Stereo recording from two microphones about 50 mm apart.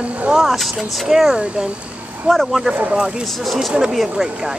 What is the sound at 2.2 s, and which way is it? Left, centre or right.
Speech, centre.